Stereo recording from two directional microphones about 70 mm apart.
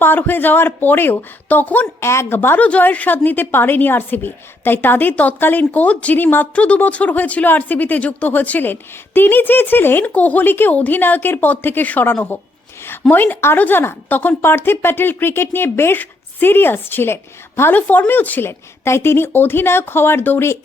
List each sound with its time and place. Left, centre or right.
0.0 s a woman's voice: left
2.0 s a woman's voice: left
2.6 s a woman's voice: left